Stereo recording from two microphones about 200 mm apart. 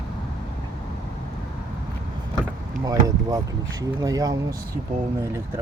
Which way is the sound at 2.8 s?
20° right (ahead or behind).